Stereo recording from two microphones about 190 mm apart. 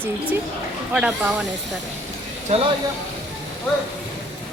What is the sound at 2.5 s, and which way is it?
Speech, 35° right (ahead or behind).